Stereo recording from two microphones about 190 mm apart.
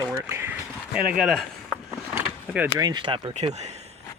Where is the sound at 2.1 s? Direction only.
10° right (ahead or behind).